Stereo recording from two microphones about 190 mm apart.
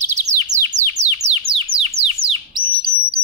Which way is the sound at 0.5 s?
40° right (ahead or behind).